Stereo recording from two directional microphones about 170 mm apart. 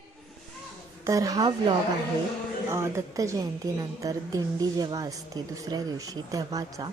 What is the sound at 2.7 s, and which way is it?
A woman's voice, 15° right (ahead or behind).